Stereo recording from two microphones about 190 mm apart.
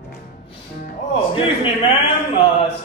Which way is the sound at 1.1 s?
30° left (ahead or behind).